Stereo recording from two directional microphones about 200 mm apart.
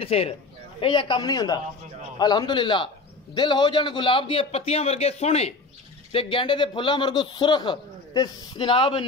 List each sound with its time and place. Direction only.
0.0 s a man's voice: 30° left (ahead or behind)